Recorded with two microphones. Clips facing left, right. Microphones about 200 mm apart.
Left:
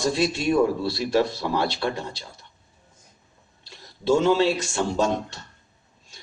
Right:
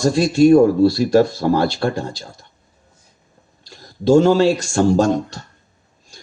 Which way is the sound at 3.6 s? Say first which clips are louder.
Right 7 dB; 45° right (ahead or behind).